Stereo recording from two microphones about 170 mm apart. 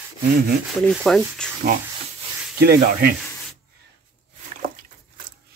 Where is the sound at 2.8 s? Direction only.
55° right (ahead or behind).